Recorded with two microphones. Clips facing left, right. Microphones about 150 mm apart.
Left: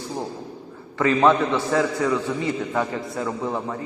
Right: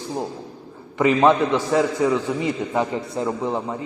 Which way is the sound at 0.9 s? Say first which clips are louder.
Right 2 dB; 20° right (ahead or behind).